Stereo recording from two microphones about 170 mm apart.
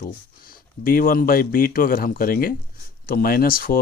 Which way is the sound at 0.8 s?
55° left (ahead or behind).